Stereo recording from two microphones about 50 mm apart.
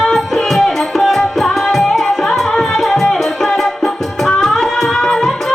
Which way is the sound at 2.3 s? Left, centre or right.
Centre.